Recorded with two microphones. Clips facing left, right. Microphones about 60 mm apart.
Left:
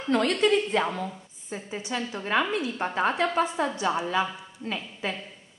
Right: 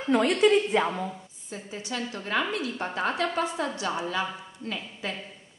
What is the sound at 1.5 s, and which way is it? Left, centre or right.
A woman's voice, left.